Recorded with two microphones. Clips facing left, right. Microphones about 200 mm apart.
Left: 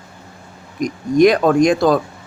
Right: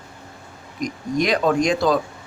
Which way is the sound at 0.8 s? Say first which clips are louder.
Left 10 dB; 50° left (ahead or behind).